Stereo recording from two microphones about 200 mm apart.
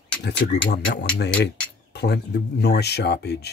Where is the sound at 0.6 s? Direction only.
65° left (ahead or behind).